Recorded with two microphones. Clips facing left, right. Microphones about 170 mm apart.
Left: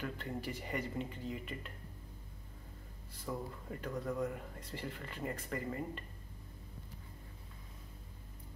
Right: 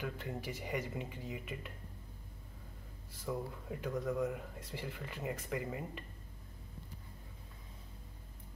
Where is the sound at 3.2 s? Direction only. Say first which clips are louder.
Right 2 dB; 5° right (ahead or behind).